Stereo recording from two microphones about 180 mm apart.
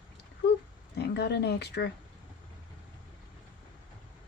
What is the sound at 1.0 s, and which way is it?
Speech, 65° left (ahead or behind).